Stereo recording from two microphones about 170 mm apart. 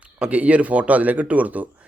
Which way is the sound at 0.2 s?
10° right (ahead or behind).